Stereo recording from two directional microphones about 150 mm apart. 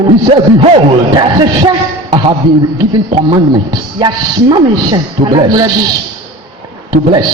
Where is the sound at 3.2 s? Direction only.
30° right (ahead or behind).